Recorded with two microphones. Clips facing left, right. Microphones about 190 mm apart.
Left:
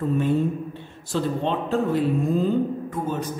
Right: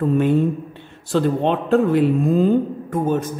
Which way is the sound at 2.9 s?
55° right (ahead or behind).